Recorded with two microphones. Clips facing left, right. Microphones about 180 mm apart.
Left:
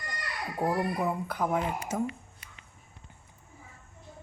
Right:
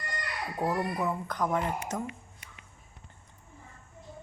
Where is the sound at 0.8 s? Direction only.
10° left (ahead or behind).